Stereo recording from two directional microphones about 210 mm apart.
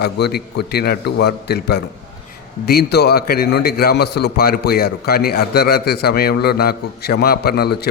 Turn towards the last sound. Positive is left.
turn(degrees=50)  # may be behind; listen again after turning